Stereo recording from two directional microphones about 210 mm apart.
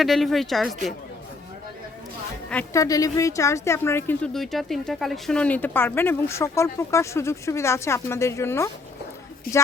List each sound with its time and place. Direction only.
0.0 s speech: centre (ahead or behind)
2.5 s a woman's voice: 10° left (ahead or behind)
9.5 s speech: 45° left (ahead or behind)